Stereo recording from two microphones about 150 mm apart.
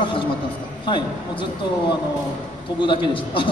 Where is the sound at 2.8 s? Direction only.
35° left (ahead or behind).